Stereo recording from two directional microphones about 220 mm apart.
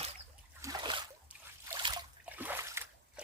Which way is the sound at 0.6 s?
20° right (ahead or behind).